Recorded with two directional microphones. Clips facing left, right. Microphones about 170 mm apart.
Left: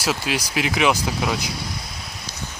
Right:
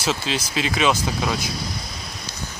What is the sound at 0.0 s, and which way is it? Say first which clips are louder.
Speech: even; 10° left (ahead or behind).